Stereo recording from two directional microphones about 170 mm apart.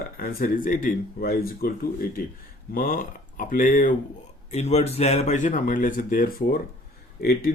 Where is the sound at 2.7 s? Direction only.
50° left (ahead or behind).